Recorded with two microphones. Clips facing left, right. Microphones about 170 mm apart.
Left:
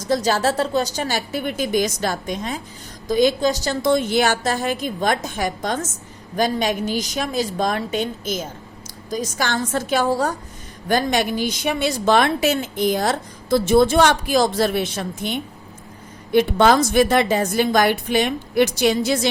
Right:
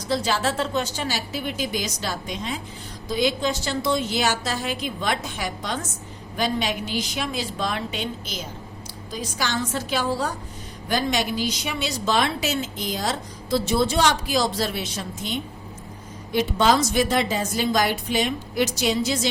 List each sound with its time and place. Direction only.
0.1 s a woman's voice: 45° left (ahead or behind); by 19.3 s 60° left (ahead or behind)